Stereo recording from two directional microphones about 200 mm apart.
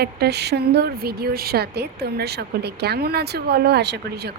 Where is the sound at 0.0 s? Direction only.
55° right (ahead or behind).